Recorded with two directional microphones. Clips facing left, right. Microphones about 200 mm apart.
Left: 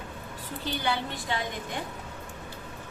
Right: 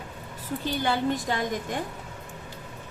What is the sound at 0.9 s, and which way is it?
Speech, 45° right (ahead or behind).